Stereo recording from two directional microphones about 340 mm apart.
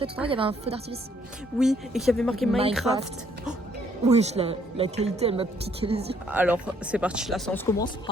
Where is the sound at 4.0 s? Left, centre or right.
Centre.